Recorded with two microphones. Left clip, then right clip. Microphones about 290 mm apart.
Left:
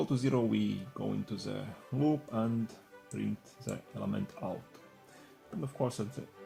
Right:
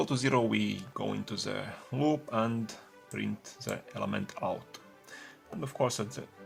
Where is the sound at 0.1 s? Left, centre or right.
Right.